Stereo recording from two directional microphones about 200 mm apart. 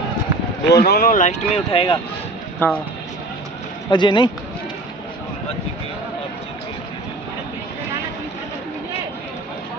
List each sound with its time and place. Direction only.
0.7 s speech: 55° left (ahead or behind); by 2.0 s 30° left (ahead or behind)
2.6 s speech: 10° left (ahead or behind)
3.9 s speech: 25° left (ahead or behind)